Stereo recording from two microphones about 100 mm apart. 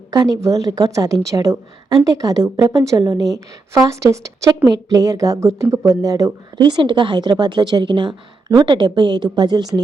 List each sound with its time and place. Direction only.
0.1 s a woman's voice: 40° right (ahead or behind)
6.7 s a woman's voice: 50° right (ahead or behind)